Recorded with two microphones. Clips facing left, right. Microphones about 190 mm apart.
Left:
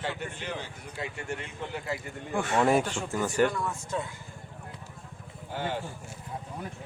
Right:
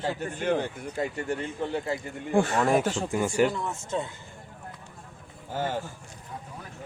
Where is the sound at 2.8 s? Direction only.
40° right (ahead or behind).